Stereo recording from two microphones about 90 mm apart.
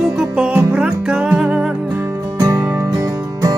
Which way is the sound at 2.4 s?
40° right (ahead or behind).